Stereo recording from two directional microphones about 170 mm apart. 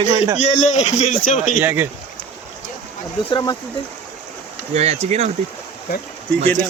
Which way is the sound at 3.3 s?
25° left (ahead or behind).